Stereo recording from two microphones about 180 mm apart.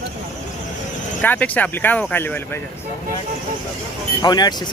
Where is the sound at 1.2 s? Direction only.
10° left (ahead or behind).